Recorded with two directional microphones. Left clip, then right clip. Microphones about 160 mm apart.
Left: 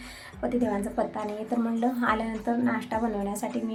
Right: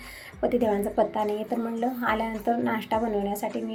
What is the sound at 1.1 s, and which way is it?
A woman's voice, centre (ahead or behind).